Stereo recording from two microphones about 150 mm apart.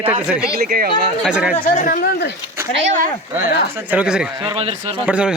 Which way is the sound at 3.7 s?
10° right (ahead or behind).